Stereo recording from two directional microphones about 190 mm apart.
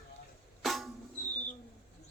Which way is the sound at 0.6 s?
Centre (ahead or behind).